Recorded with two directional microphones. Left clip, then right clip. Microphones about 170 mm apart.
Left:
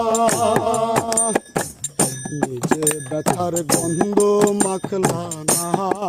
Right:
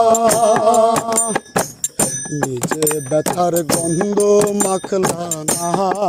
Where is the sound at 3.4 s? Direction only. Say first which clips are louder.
Right 4 dB; 25° right (ahead or behind).